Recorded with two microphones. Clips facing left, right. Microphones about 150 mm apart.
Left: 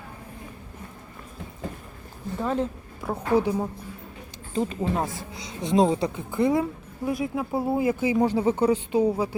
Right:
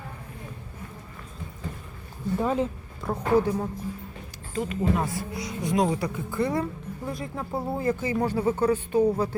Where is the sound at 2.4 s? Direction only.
5° right (ahead or behind); by 3.7 s 15° left (ahead or behind).